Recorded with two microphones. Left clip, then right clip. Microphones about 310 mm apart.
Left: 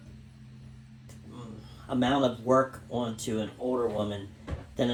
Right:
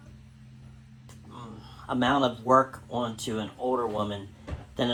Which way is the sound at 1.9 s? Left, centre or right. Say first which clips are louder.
Right 2 dB; centre.